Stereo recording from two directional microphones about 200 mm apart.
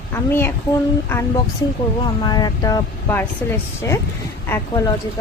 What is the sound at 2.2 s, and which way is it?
A woman's voice, 20° left (ahead or behind).